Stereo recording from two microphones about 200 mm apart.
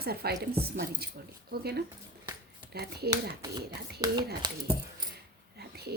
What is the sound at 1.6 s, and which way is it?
Speech, 50° right (ahead or behind).